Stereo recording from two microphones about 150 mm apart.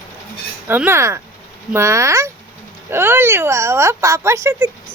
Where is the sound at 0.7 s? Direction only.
15° right (ahead or behind).